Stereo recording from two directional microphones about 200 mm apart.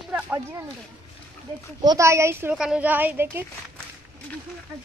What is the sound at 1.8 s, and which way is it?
A woman's voice, 15° right (ahead or behind).